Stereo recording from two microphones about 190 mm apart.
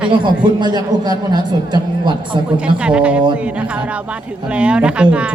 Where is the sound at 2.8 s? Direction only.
5° right (ahead or behind).